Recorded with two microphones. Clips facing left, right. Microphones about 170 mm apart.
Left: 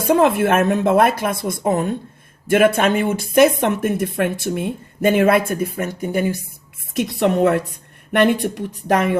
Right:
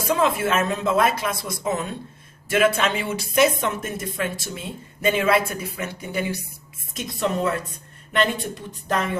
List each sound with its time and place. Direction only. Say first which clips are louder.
0.1 s speech: left 6 dB; 60° left (ahead or behind)
6.9 s speech: left 7 dB; 65° left (ahead or behind)